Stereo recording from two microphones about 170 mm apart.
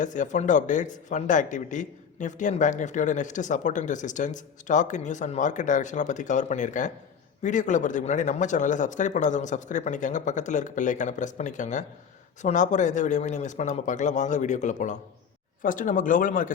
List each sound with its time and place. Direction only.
0.0 s speech: 45° left (ahead or behind)